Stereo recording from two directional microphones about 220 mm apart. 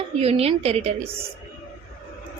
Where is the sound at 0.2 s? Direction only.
25° right (ahead or behind).